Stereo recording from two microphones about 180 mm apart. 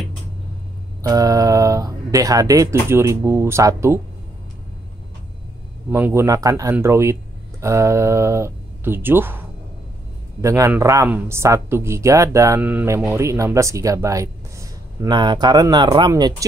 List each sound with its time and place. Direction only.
1.0 s speech: 20° right (ahead or behind)
5.9 s speech: 10° right (ahead or behind)
10.4 s speech: 15° right (ahead or behind)